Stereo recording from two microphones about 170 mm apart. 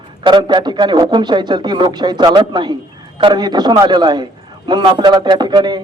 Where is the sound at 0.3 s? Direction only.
25° right (ahead or behind).